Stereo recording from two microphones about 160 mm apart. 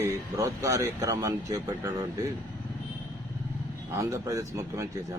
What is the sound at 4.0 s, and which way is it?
Speech, 20° right (ahead or behind).